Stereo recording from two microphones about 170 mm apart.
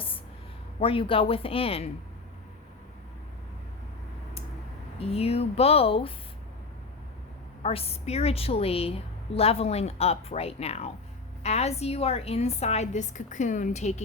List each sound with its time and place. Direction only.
0.8 s a woman's voice: 30° left (ahead or behind)
4.9 s a woman's voice: 35° left (ahead or behind)
7.6 s a woman's voice: 35° left (ahead or behind)